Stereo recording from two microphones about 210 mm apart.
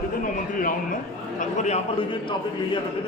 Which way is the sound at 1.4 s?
35° left (ahead or behind).